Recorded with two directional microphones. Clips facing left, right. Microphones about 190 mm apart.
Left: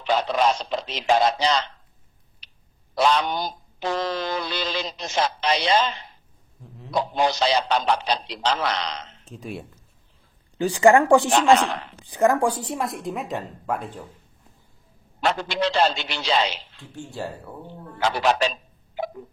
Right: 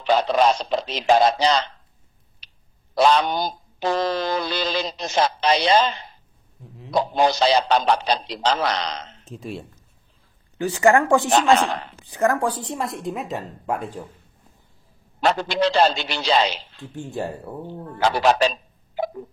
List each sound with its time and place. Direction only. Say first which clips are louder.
0.0 s speech: right 3 dB; 35° right (ahead or behind)
2.4 s clicking: right 1 dB; 35° right (ahead or behind)
3.0 s speech: right 3 dB; 35° right (ahead or behind)
6.9 s speech: right 3 dB; 35° right (ahead or behind)
9.3 s a woman's voice: right 2 dB; centre (ahead or behind)
10.6 s a woman's voice: left 1 dB; 15° left (ahead or behind)
11.6 s speech: right 2 dB; 35° right (ahead or behind)
12.0 s a woman's voice: left 2 dB; 15° left (ahead or behind)
12.7 s a woman's voice: even; centre (ahead or behind)
15.1 s speech: right 3 dB; 35° right (ahead or behind)
16.9 s speech: right 4 dB; 20° right (ahead or behind)
17.9 s speech: right 3 dB; 35° right (ahead or behind)